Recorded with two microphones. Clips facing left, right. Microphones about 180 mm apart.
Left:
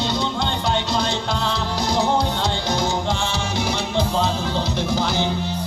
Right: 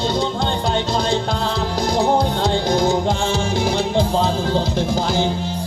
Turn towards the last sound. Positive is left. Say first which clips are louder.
# right 3 dB
turn(degrees=-45)  # may be behind; listen again after turning